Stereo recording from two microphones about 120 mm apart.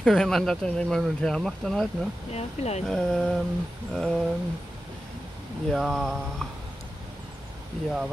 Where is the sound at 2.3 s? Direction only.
60° left (ahead or behind).